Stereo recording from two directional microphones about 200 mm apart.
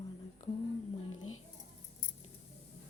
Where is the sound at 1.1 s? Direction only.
90° left.